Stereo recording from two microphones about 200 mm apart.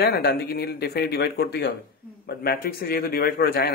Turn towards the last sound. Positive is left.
turn(degrees=50)  # may be behind; listen again after turning